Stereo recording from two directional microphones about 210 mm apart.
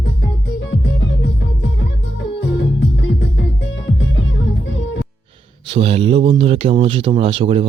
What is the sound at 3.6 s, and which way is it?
Music, 60° left (ahead or behind).